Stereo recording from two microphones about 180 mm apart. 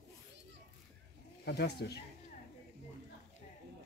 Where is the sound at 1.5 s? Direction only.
65° left (ahead or behind).